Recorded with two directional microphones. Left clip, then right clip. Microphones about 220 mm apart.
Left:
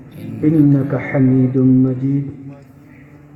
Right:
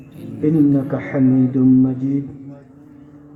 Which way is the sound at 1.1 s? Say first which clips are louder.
Left 1 dB; 40° right (ahead or behind).